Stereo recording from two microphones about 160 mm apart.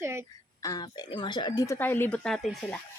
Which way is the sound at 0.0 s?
15° right (ahead or behind).